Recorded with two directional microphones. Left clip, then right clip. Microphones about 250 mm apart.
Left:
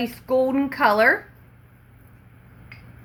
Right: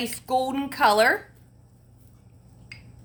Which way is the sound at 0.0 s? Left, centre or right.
Right.